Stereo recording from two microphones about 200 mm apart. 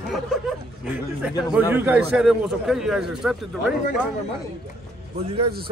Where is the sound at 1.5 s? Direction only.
10° right (ahead or behind).